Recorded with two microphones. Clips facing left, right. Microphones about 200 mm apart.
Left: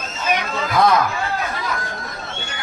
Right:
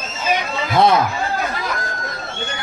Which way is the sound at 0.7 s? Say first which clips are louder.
Right 2 dB; 25° right (ahead or behind).